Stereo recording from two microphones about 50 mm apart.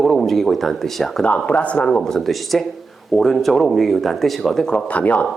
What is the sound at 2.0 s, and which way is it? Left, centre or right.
Speech, centre.